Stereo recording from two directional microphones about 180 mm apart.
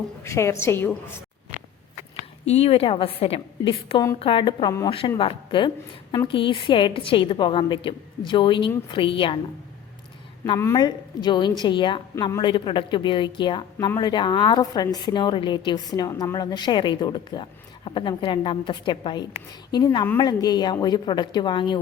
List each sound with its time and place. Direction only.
0.2 s a woman's voice: 15° left (ahead or behind)
2.4 s a woman's voice: 35° left (ahead or behind)
3.7 s speech: 25° left (ahead or behind)
10.6 s speech: 20° left (ahead or behind)